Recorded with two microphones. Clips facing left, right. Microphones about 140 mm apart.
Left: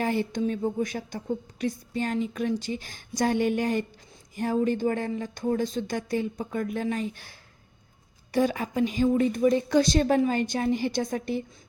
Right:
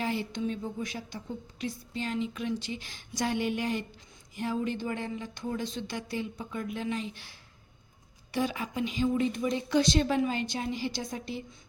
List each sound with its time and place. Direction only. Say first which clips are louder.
0.0 s a woman's voice: left 5 dB; 50° left (ahead or behind)